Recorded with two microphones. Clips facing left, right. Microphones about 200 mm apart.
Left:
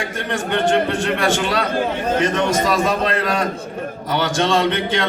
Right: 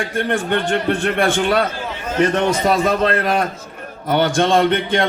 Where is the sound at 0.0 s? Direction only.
55° right (ahead or behind).